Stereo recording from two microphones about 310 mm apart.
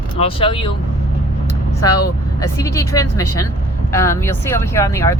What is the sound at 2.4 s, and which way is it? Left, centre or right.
Speech, centre.